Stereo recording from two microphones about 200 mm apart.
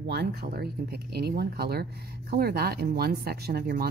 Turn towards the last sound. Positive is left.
turn(degrees=-50)  # may be behind; listen again after turning